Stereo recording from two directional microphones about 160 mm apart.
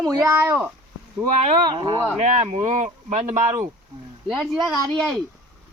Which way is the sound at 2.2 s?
40° right (ahead or behind).